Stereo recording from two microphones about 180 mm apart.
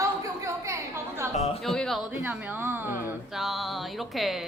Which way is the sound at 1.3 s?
35° left (ahead or behind).